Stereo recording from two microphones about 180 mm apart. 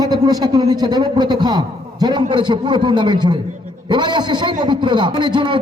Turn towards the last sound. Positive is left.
turn(degrees=-25)  # may be behind; listen again after turning